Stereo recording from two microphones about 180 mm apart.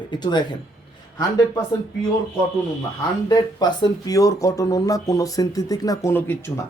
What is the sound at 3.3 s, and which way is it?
Speech, 25° left (ahead or behind).